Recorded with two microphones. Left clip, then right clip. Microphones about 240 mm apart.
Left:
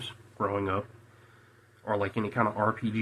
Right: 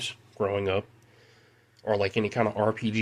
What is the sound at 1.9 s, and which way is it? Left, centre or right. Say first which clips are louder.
Speech: right 4 dB; right.